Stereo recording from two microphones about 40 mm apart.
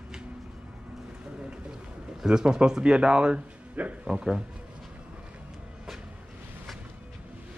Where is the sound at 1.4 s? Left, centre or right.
Right.